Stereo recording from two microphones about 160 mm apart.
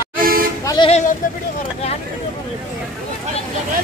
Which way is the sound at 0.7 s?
30° left (ahead or behind).